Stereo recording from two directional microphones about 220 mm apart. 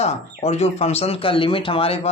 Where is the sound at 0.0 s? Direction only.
30° left (ahead or behind).